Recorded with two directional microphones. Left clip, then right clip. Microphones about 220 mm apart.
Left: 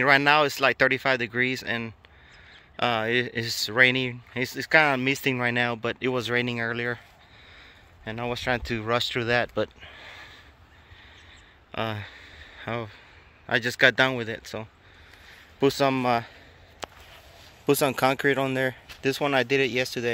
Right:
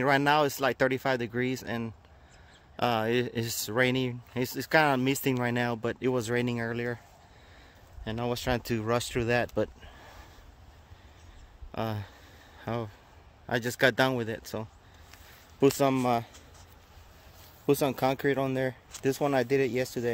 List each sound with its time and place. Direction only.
0.0 s speech: 10° right (ahead or behind)
8.0 s speech: 20° right (ahead or behind)
11.7 s speech: 10° right (ahead or behind)
15.6 s speech: 10° right (ahead or behind)
17.6 s speech: 5° right (ahead or behind)